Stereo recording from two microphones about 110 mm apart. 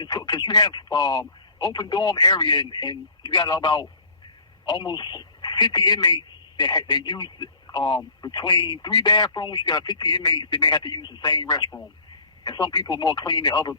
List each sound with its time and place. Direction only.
0.0 s a man's voice: 40° left (ahead or behind)